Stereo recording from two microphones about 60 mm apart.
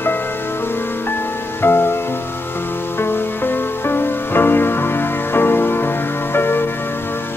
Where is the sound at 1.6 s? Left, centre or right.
Left.